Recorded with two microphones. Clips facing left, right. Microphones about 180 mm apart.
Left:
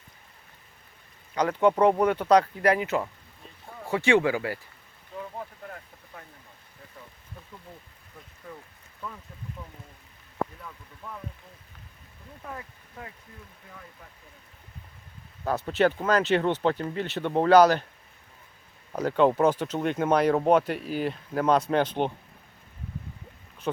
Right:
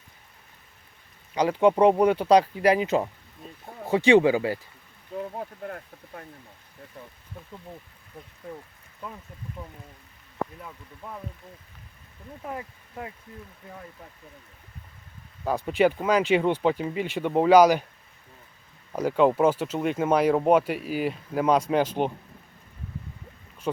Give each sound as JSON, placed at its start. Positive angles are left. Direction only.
{"t": 1.4, "sound": "speech", "side_deg": -10}
{"t": 10.6, "sound": "speech", "side_deg": -20}
{"t": 12.5, "sound": "speech", "side_deg": -20}
{"t": 15.4, "sound": "speech", "side_deg": -10}
{"t": 18.9, "sound": "speech", "side_deg": -5}
{"t": 23.7, "sound": "speech", "side_deg": -5}